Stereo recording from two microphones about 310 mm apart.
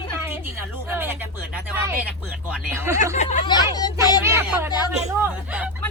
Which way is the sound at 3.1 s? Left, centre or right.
Left.